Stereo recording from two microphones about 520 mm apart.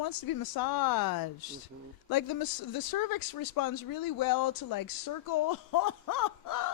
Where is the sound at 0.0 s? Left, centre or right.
Left.